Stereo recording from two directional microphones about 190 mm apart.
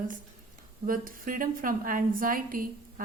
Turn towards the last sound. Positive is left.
turn(degrees=-45)  # may be behind; listen again after turning